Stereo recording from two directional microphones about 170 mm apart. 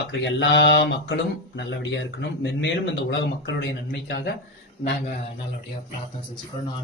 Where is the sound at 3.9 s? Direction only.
65° left (ahead or behind).